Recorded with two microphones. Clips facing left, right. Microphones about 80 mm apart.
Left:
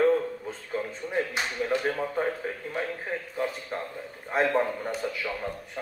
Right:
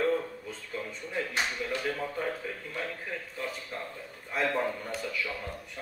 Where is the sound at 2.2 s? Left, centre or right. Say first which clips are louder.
Left 4 dB; left.